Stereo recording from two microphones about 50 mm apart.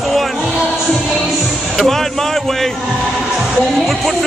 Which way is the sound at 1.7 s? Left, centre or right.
Centre.